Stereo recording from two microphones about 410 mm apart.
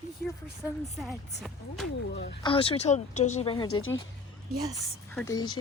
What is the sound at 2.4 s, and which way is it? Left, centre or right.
Speech, centre.